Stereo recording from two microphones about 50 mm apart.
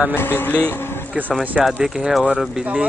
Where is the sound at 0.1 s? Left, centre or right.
Left.